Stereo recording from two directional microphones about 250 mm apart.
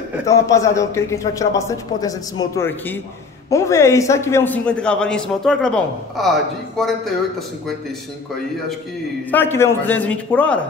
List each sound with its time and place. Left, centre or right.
0.3 s a man's voice: centre
9.3 s a man's voice: centre